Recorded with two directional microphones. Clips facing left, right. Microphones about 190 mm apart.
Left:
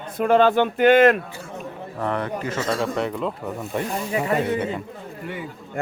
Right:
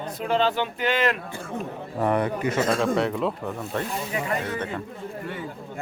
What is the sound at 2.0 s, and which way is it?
Speech, 15° right (ahead or behind).